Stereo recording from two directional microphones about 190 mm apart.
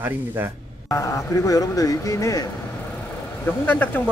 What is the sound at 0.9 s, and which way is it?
Speech, 15° left (ahead or behind).